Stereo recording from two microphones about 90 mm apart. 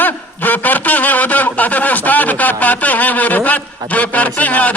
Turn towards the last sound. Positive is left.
turn(degrees=15)  # may be behind; listen again after turning